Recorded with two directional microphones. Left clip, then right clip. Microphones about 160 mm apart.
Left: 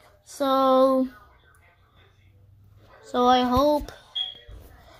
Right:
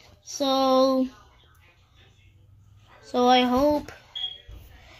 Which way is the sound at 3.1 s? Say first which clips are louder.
Even; 15° right (ahead or behind).